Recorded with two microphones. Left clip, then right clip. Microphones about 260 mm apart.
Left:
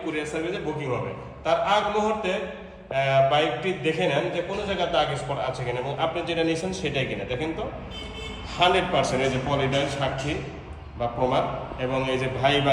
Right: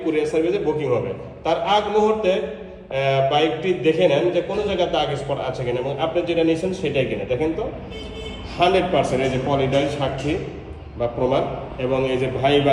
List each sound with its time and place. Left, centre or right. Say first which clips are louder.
0.0 s a man's voice: right 9 dB; centre
7.3 s a man's voice: right 7 dB; left
8.5 s a man's voice: right 3 dB; left
9.0 s a man's voice: right 3 dB; centre